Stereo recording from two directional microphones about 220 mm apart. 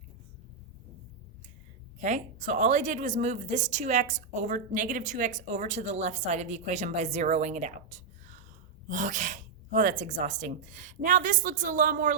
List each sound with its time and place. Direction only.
2.0 s a woman's voice: 35° right (ahead or behind)